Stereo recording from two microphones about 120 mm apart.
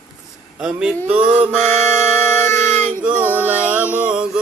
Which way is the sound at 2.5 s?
20° left (ahead or behind).